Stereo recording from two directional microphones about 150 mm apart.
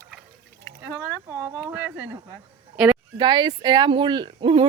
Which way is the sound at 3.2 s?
30° right (ahead or behind).